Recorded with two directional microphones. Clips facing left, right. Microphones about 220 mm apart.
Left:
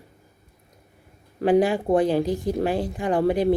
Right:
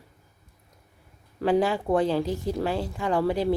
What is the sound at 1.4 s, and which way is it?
Speech, 15° left (ahead or behind).